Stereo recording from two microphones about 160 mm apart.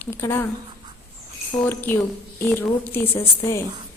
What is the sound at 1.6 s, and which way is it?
A woman's voice, 15° left (ahead or behind).